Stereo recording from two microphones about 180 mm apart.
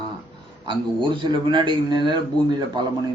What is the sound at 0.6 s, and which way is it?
A man's voice, 25° right (ahead or behind).